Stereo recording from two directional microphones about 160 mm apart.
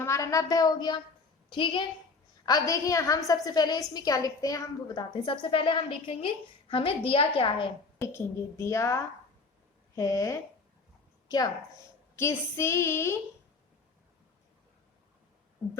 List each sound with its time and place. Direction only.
0.0 s a woman's voice: 20° left (ahead or behind)
7.9 s a woman's voice: 15° left (ahead or behind)